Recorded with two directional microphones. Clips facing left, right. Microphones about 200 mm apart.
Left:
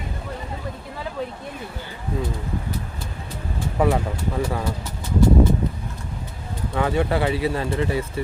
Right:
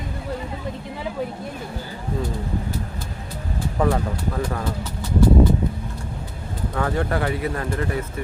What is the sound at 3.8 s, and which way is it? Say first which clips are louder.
Speech: left 1 dB; 10° left (ahead or behind).